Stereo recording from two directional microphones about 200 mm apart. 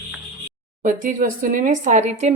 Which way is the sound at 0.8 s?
40° right (ahead or behind).